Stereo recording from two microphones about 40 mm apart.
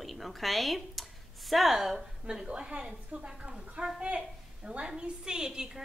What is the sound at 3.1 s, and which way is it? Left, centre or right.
Speech, right.